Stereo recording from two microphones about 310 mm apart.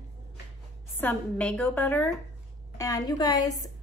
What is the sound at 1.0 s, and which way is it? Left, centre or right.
A woman's voice, centre.